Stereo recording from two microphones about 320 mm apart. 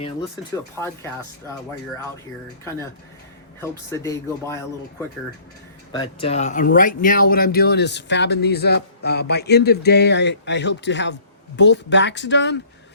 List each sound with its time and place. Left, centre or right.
0.8 s speech: centre
3.6 s speech: centre; by 12.5 s left